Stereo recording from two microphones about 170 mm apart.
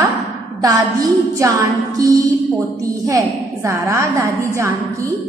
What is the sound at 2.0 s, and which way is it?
A woman's voice, 20° right (ahead or behind).